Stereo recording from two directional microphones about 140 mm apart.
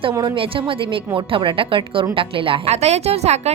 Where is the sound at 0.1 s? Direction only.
30° right (ahead or behind).